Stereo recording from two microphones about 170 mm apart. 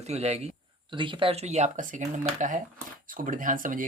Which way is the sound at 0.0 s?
40° right (ahead or behind).